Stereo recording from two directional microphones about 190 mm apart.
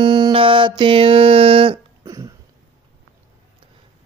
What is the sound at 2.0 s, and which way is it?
Cough, 15° right (ahead or behind).